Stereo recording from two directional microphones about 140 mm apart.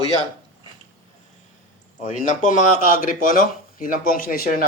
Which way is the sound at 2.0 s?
60° left (ahead or behind).